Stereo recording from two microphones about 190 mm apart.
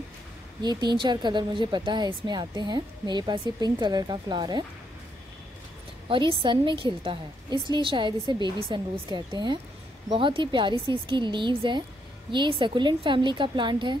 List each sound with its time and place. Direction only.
0.6 s a woman's voice: 20° right (ahead or behind)
6.0 s a woman's voice: 25° right (ahead or behind)